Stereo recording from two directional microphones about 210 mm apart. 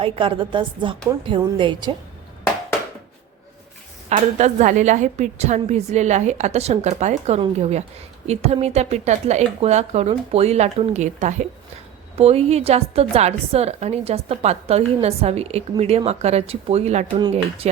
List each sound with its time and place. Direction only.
0.0 s a woman's voice: 25° right (ahead or behind)
4.1 s a woman's voice: 35° right (ahead or behind)